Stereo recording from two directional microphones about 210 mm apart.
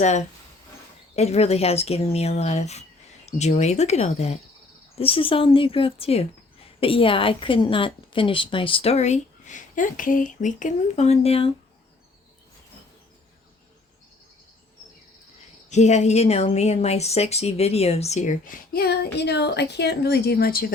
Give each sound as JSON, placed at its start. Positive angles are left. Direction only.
{"t": 0.0, "sound": "a woman's voice", "side_deg": 35}
{"t": 15.7, "sound": "a woman's voice", "side_deg": 35}